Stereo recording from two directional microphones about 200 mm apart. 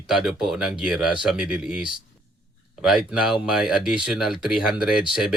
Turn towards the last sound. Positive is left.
turn(degrees=-5)  # may be behind; listen again after turning